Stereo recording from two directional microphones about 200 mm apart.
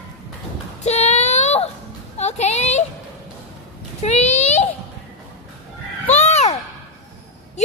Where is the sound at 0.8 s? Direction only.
35° left (ahead or behind).